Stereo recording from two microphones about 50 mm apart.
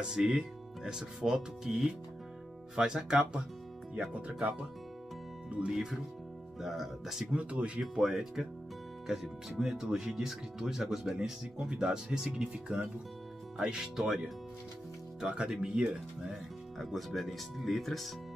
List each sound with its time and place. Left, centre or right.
0.0 s speech: centre
4.1 s speech: right; by 7.2 s centre
7.3 s speech: right
7.8 s speech: centre
15.1 s speech: centre
16.7 s speech: centre